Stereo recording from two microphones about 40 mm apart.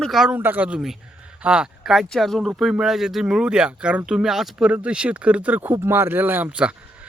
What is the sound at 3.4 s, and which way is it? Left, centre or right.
Speech, right.